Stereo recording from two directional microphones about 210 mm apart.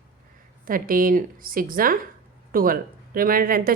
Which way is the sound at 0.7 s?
40° right (ahead or behind).